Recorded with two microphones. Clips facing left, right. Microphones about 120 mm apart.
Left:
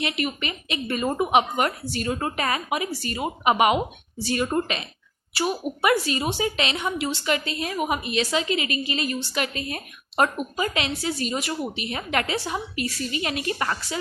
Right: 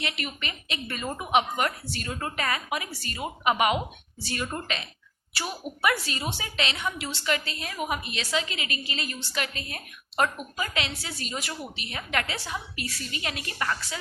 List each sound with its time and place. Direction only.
0.0 s a woman's voice: 15° left (ahead or behind)
1.0 s a woman's voice: 30° left (ahead or behind)